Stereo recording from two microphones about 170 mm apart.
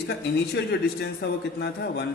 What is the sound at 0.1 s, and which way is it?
A man's voice, 75° left (ahead or behind).